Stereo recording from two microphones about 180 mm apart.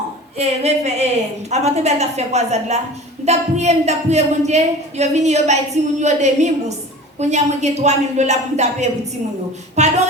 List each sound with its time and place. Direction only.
0.3 s a woman's voice: 35° right (ahead or behind)